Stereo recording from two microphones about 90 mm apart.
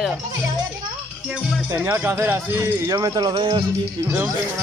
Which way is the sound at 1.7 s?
30° right (ahead or behind).